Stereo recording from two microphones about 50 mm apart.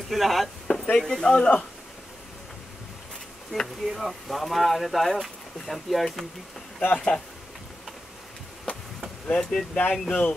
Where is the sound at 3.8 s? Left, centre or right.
Centre.